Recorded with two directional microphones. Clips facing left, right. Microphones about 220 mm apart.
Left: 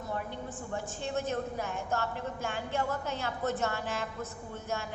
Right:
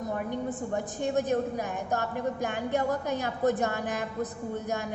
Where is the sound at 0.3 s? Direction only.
15° right (ahead or behind).